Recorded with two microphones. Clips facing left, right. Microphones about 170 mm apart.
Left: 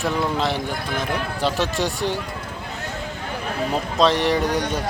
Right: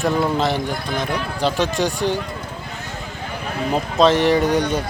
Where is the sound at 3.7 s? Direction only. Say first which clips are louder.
Right 4 dB; centre (ahead or behind).